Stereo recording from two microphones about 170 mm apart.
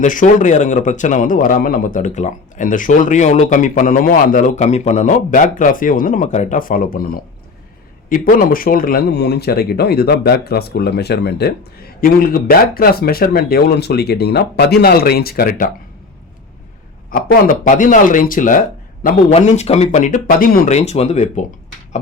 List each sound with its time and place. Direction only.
0.0 s a man's voice: 50° left (ahead or behind)
17.1 s a man's voice: 55° left (ahead or behind)
20.7 s speech: 40° left (ahead or behind)